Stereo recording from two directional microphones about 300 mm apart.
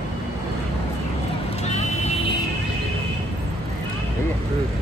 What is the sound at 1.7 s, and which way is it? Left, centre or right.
Vehicle, left.